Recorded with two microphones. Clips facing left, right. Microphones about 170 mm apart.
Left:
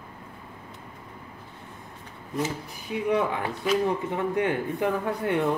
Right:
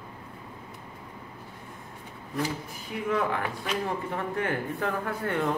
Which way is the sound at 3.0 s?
20° left (ahead or behind).